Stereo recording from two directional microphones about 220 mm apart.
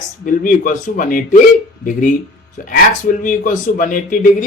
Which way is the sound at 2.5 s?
35° left (ahead or behind).